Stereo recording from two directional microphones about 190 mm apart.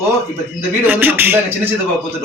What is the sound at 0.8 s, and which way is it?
Speech, 10° right (ahead or behind).